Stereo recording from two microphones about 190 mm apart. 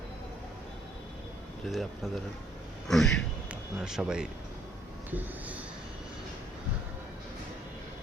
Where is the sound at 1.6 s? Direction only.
Centre (ahead or behind).